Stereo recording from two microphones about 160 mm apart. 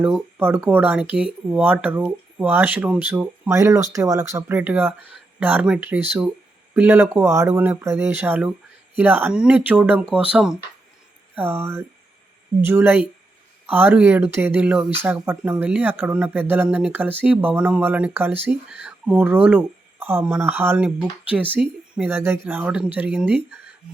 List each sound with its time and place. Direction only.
0.0 s speech: 10° right (ahead or behind)